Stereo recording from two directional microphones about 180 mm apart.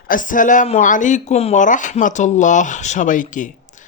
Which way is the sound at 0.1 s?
45° left (ahead or behind).